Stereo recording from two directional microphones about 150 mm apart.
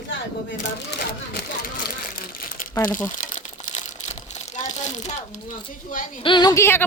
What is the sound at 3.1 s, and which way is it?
Crumpling, 55° left (ahead or behind).